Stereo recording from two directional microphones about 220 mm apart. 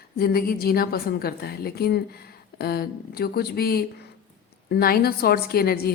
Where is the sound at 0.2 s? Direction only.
45° left (ahead or behind).